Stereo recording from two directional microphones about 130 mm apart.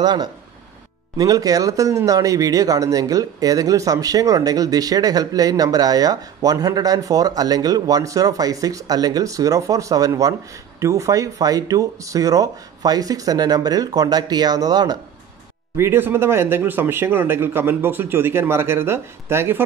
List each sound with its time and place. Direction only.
0.0 s speech: 35° right (ahead or behind)
15.7 s speech: 20° right (ahead or behind)